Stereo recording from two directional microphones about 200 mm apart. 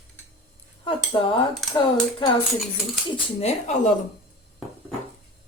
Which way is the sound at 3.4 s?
35° left (ahead or behind).